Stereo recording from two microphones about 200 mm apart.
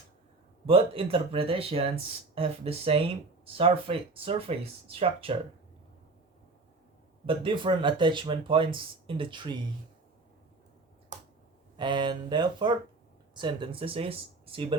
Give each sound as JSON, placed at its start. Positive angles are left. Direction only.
{"t": 0.6, "sound": "speech", "side_deg": -30}
{"t": 7.3, "sound": "speech", "side_deg": -25}
{"t": 11.8, "sound": "speech", "side_deg": -25}